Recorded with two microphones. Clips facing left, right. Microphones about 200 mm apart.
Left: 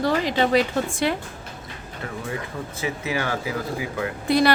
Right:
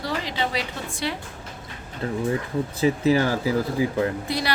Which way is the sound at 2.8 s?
35° right (ahead or behind).